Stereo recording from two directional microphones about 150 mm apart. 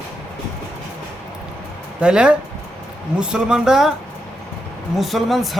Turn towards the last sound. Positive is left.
turn(degrees=0)  # may be behind; listen again after turning